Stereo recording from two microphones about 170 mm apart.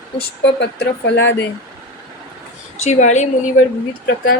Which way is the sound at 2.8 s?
45° left (ahead or behind).